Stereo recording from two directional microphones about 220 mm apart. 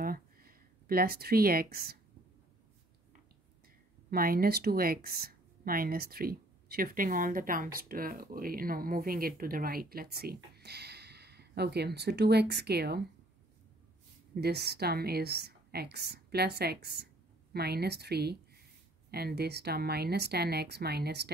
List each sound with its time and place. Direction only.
0.0 s a sound: 40° right (ahead or behind)
4.1 s speech: 40° right (ahead or behind)
14.3 s a woman's voice: 45° right (ahead or behind)